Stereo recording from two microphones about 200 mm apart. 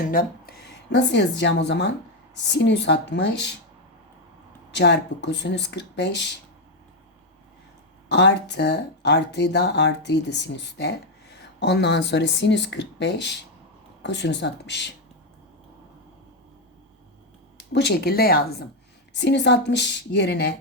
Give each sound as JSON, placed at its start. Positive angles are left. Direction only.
{"t": 0.1, "sound": "speech", "side_deg": 45}
{"t": 4.7, "sound": "speech", "side_deg": 60}
{"t": 8.1, "sound": "speech", "side_deg": 60}
{"t": 17.6, "sound": "speech", "side_deg": 55}